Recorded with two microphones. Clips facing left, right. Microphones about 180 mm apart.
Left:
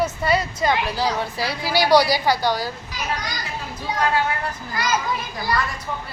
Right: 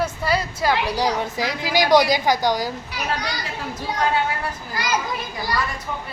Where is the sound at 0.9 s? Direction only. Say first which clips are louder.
Right 1 dB; 15° right (ahead or behind).